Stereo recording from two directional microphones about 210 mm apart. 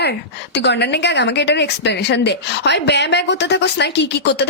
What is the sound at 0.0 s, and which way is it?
A woman's voice, 55° left (ahead or behind).